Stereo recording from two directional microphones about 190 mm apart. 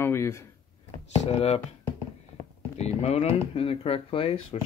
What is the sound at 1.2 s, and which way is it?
Speech, 35° left (ahead or behind).